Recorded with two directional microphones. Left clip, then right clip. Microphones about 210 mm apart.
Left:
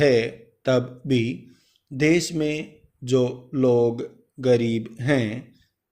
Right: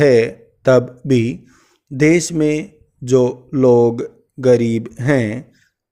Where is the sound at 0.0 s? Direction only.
55° right (ahead or behind).